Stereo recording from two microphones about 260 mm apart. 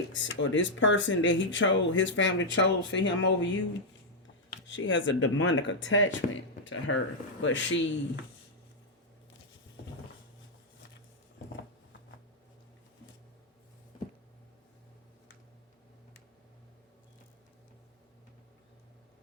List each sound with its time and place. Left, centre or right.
0.1 s speech: left
4.6 s speech: left